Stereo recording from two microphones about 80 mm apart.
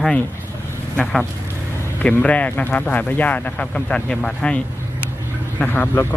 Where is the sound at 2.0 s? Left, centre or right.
Centre.